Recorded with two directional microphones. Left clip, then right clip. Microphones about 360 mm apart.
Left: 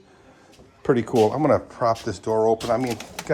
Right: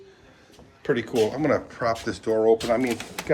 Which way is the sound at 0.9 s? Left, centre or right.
Centre.